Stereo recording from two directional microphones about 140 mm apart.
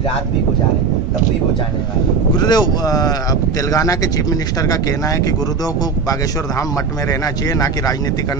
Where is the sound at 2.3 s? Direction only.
30° left (ahead or behind).